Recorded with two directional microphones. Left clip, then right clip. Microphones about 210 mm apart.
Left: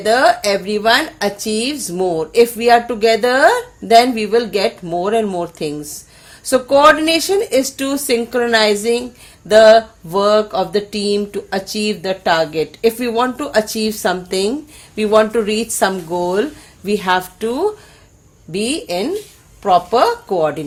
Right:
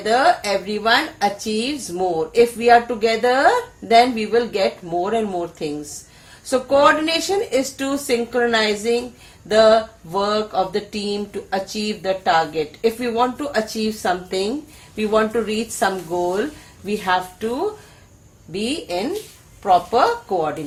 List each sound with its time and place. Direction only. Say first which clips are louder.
0.0 s a woman's voice: left 4 dB; 50° left (ahead or behind)